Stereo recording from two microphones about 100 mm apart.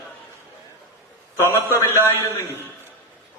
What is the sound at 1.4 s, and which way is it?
A man's voice, 25° left (ahead or behind).